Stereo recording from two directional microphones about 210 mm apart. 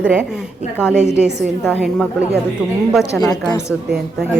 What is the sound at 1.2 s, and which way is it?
Speech, centre (ahead or behind).